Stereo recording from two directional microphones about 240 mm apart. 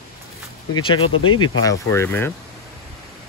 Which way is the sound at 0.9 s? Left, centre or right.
Left.